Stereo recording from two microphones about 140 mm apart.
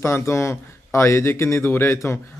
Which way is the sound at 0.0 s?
20° left (ahead or behind).